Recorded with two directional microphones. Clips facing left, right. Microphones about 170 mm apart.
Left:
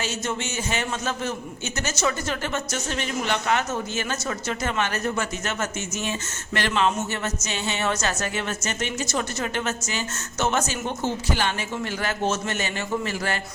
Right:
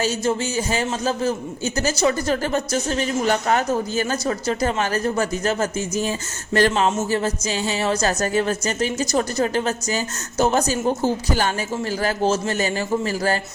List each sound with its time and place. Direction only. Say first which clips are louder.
0.0 s a man's voice: right 7 dB; 35° right (ahead or behind)